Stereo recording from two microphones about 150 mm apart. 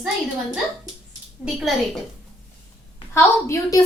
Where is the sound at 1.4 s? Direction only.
Centre (ahead or behind).